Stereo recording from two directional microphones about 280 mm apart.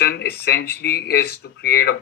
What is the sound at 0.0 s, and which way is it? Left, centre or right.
Speech, left.